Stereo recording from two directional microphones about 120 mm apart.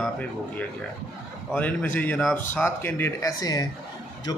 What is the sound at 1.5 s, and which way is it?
A man's voice, 15° left (ahead or behind).